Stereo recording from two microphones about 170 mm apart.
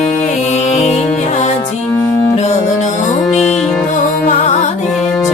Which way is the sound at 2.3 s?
45° left (ahead or behind).